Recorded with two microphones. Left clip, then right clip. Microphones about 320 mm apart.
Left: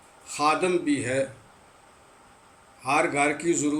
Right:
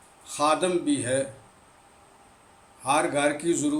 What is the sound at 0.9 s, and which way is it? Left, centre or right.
Speech, centre.